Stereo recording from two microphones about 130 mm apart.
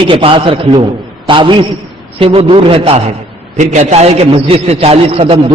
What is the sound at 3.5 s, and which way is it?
A man's voice, 65° right (ahead or behind).